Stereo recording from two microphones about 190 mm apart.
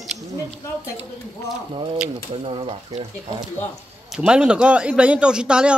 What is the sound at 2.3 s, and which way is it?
Speech, 30° right (ahead or behind).